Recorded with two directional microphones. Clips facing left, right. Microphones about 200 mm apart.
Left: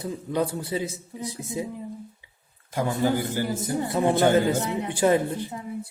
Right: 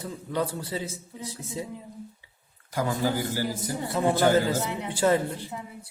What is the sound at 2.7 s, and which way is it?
Speech, 25° left (ahead or behind).